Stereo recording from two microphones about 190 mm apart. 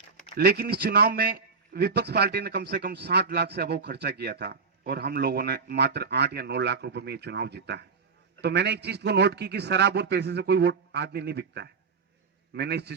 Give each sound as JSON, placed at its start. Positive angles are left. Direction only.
{"t": 0.3, "sound": "a man's voice", "side_deg": -55}